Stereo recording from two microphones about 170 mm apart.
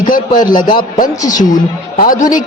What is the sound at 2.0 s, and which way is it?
Speech, 55° left (ahead or behind).